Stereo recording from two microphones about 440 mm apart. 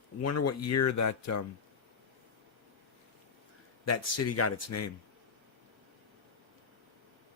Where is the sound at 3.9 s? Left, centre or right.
Left.